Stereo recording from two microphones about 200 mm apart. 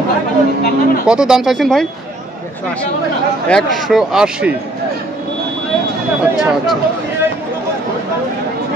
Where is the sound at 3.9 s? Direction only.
Centre (ahead or behind).